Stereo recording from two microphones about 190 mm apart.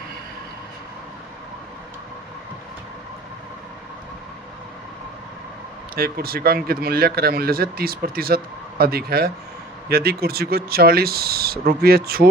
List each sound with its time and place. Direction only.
6.0 s speech: 50° right (ahead or behind)